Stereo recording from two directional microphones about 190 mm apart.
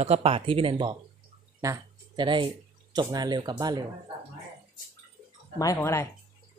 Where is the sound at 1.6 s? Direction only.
20° right (ahead or behind).